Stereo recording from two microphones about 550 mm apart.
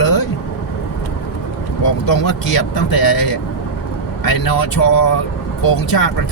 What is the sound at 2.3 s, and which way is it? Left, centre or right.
Speech, left.